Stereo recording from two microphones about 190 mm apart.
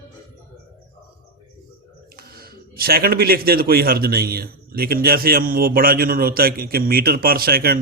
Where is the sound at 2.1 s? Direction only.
50° right (ahead or behind).